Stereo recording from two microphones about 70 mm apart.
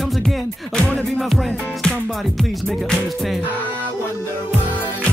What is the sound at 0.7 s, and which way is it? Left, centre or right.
Music, centre.